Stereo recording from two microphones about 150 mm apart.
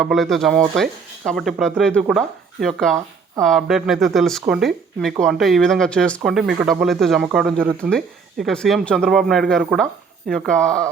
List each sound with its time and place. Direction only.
0.0 s speech: centre (ahead or behind)